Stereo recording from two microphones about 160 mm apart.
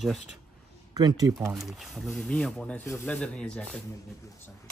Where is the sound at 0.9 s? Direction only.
25° right (ahead or behind).